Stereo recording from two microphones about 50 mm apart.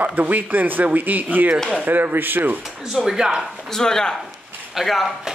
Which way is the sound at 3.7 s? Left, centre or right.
Centre.